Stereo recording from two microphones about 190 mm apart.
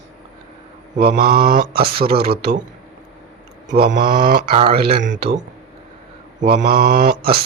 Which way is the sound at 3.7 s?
50° right (ahead or behind).